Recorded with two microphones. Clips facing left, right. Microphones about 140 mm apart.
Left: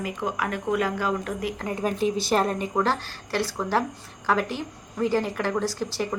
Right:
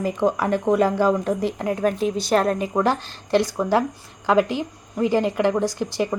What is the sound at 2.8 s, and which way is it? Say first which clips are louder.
A woman's voice: right 5 dB; 20° right (ahead or behind).